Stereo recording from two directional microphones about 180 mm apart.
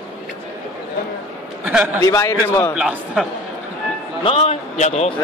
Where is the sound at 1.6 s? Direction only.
10° right (ahead or behind).